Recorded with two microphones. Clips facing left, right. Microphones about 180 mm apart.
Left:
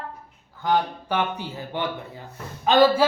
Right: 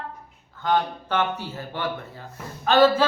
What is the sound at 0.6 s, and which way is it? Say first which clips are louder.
A man's voice: even; 10° left (ahead or behind).